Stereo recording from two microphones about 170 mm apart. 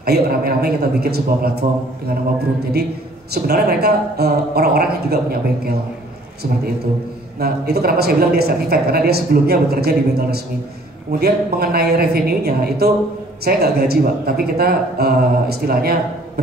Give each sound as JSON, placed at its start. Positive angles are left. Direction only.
{"t": 0.0, "sound": "speech", "side_deg": -65}
{"t": 3.4, "sound": "speech", "side_deg": -65}
{"t": 7.3, "sound": "speech", "side_deg": -65}